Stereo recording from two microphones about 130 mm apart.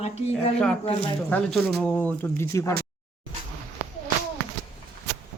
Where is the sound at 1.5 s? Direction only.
Centre (ahead or behind).